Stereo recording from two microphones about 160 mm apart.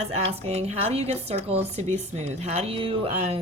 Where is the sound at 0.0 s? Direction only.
40° right (ahead or behind).